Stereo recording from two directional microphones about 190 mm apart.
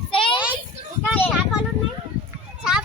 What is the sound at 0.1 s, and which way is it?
Child singing, 25° left (ahead or behind).